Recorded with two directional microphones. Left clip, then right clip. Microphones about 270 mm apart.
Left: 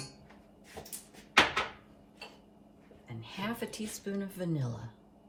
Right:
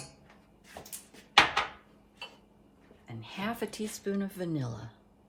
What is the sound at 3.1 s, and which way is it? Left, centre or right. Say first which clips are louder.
Speech: right 2 dB; right.